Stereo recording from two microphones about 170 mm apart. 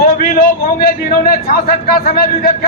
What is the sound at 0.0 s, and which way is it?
A man's voice, 55° left (ahead or behind).